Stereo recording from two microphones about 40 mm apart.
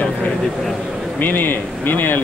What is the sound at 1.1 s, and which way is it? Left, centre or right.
Speech, left.